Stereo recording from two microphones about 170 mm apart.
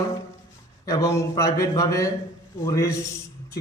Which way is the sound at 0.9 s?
20° left (ahead or behind).